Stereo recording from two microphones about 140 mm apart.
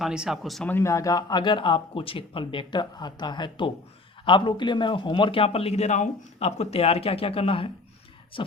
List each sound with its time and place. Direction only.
0.0 s speech: 5° right (ahead or behind)
0.7 s a man's voice: 20° left (ahead or behind); by 8.5 s 40° left (ahead or behind)